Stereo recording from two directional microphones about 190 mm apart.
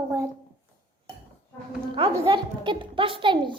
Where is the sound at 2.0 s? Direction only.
30° right (ahead or behind).